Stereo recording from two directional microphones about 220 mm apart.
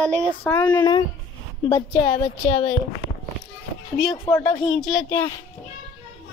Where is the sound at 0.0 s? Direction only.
5° left (ahead or behind).